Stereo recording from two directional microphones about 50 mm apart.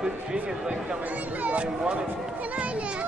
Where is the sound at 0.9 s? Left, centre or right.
Right.